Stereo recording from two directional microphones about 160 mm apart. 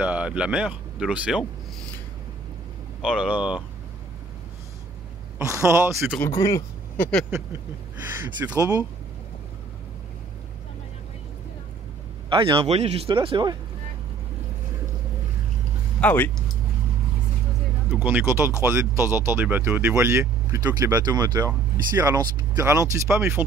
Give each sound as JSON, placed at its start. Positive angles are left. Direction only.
{"t": 0.0, "sound": "speech", "side_deg": -10}
{"t": 3.0, "sound": "speech", "side_deg": -5}
{"t": 5.4, "sound": "speech", "side_deg": -20}
{"t": 6.2, "sound": "speech", "side_deg": 20}
{"t": 8.5, "sound": "speech", "side_deg": -20}
{"t": 12.3, "sound": "a man's voice", "side_deg": -35}
{"t": 16.0, "sound": "speech", "side_deg": 10}
{"t": 18.0, "sound": "speech", "side_deg": -15}